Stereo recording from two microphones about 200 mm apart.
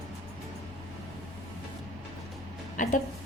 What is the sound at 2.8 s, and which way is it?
Music, 40° left (ahead or behind).